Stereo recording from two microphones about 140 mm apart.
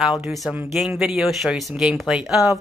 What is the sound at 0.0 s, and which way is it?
Speech, 5° right (ahead or behind).